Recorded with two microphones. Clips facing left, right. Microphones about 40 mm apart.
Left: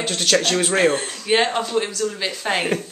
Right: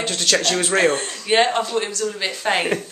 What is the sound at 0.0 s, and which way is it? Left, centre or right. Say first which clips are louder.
Speech: left 1 dB; centre.